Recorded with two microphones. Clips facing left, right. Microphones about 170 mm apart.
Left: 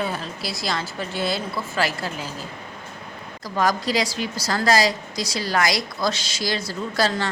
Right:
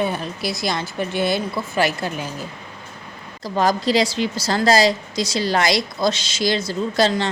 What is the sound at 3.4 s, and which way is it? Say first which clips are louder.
A woman's voice: right 3 dB; 25° right (ahead or behind).